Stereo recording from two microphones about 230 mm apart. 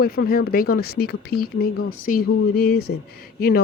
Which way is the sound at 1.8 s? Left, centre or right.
Left.